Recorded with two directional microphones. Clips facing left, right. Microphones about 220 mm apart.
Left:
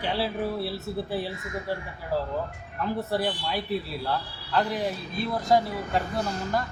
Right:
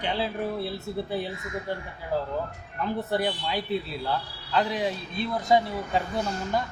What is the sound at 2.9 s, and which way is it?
A man's voice, centre (ahead or behind).